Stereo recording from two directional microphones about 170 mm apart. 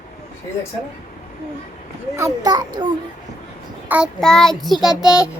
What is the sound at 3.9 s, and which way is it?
Child singing, centre (ahead or behind).